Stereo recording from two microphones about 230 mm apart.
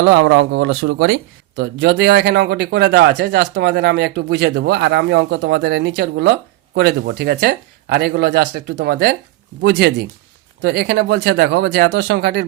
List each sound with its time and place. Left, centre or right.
0.0 s speech: right